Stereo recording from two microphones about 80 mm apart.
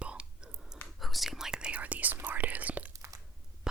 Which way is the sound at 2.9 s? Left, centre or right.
Right.